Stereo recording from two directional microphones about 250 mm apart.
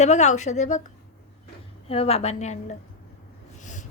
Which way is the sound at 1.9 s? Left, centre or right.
Left.